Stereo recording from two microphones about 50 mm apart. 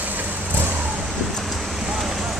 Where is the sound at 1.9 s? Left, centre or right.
Centre.